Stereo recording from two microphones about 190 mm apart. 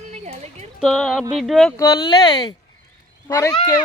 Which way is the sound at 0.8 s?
Centre (ahead or behind).